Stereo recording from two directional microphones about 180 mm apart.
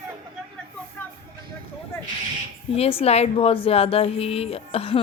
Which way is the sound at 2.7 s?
35° left (ahead or behind).